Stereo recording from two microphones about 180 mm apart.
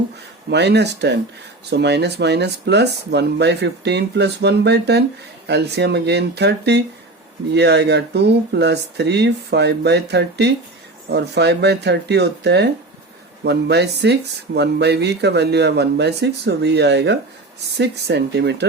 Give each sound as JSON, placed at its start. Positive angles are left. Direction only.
{"t": 0.5, "sound": "speech", "side_deg": -70}